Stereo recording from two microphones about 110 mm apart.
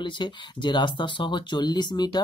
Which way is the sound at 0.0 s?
45° left (ahead or behind).